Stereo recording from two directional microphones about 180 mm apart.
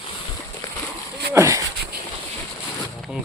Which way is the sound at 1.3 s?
15° right (ahead or behind).